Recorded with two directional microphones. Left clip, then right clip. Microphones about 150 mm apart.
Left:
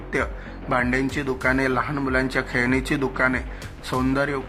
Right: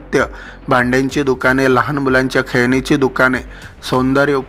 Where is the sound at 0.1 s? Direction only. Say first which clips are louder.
Right 10 dB; 35° right (ahead or behind).